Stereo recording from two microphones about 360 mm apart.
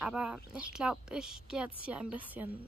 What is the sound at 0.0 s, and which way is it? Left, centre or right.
A woman's voice, centre.